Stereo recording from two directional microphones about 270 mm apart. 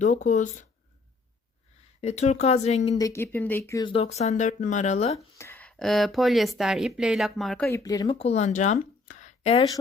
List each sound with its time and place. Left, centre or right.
0.0 s speech: left
2.0 s speech: left
3.0 s speech: centre; by 5.1 s left
5.1 s speech: centre